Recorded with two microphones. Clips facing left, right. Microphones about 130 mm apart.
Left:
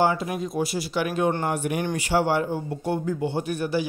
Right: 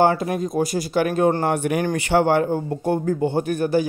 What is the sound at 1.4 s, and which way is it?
A man's voice, 65° right (ahead or behind).